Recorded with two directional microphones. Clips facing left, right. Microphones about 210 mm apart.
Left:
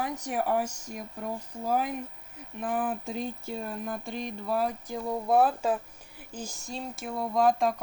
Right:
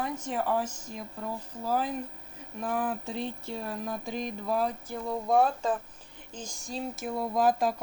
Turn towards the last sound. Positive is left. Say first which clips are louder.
# left 1 dB
turn(degrees=-5)  # may be behind; listen again after turning